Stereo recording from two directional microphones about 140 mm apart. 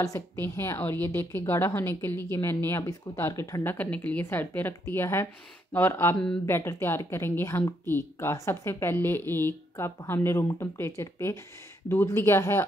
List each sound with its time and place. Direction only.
0.0 s a woman's voice: 20° left (ahead or behind)